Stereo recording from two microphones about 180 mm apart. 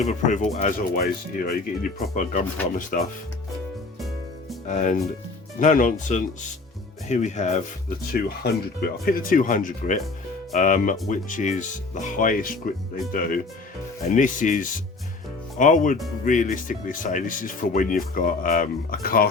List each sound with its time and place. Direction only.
0.0 s speech: 40° left (ahead or behind)
4.6 s speech: 40° left (ahead or behind)
8.1 s speech: 60° left (ahead or behind)